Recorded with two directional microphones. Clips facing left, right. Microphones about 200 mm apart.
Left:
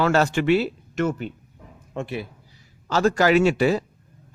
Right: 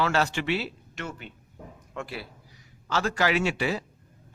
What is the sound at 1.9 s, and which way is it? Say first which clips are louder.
A man's voice: left 7 dB; 20° left (ahead or behind).